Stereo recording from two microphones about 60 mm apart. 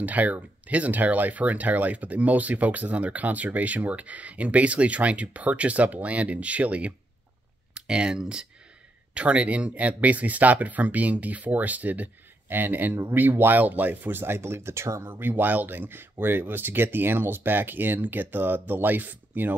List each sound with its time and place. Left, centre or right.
0.0 s speech: right
15.0 s speech: right